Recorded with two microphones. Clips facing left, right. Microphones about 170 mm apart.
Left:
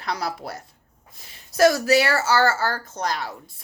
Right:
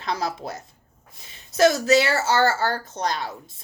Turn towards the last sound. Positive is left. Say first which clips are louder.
# even
turn(degrees=-25)  # may be behind; listen again after turning